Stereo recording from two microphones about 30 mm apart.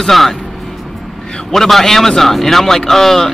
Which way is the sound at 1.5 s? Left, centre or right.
Centre.